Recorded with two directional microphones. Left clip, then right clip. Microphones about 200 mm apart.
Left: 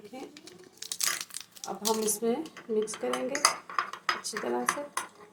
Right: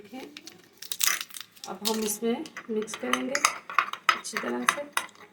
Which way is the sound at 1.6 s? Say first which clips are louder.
Even; 10° left (ahead or behind).